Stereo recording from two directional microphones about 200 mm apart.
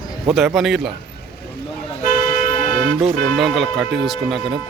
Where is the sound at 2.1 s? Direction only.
40° left (ahead or behind).